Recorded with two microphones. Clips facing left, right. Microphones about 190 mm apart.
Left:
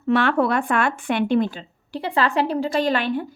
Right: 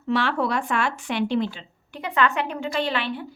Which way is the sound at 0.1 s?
55° left (ahead or behind).